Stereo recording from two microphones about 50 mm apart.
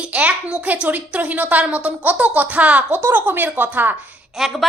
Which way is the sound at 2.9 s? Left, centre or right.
Right.